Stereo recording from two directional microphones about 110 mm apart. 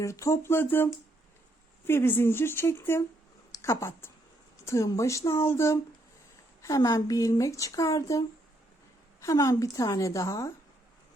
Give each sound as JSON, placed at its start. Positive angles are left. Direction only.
{"t": 0.0, "sound": "speech", "side_deg": 25}
{"t": 1.9, "sound": "speech", "side_deg": 20}
{"t": 9.2, "sound": "speech", "side_deg": 30}